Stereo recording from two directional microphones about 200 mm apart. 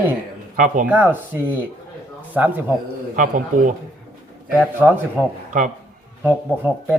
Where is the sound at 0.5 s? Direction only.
40° right (ahead or behind).